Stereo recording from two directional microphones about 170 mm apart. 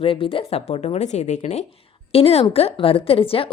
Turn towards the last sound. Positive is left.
turn(degrees=35)  # may be behind; listen again after turning